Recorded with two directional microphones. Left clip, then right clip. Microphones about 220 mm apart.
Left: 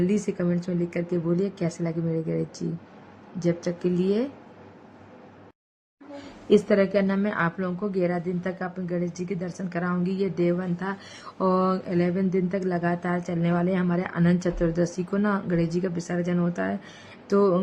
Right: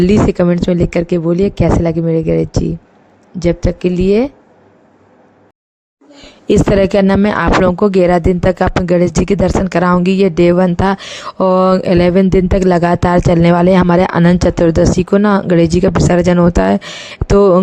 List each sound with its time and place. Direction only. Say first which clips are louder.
0.0 s speech: right 15 dB; 40° right (ahead or behind)
6.5 s speech: right 10 dB; 45° right (ahead or behind)